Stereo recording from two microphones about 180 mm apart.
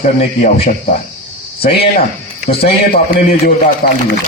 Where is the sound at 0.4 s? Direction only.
45° left (ahead or behind).